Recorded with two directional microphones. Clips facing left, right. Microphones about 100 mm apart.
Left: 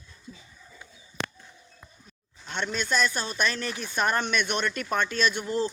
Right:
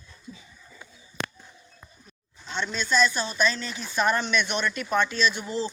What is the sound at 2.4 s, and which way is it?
Speech, 55° left (ahead or behind).